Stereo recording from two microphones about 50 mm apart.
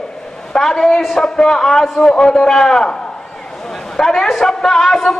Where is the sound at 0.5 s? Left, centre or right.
Centre.